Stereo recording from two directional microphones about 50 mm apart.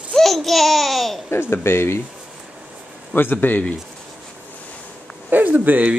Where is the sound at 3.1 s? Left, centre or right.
Left.